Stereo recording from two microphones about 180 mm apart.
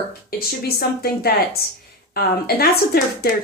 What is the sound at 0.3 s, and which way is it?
A woman's voice, 60° left (ahead or behind).